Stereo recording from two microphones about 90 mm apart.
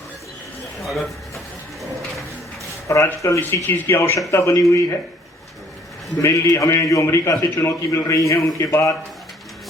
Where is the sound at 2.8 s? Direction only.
30° left (ahead or behind).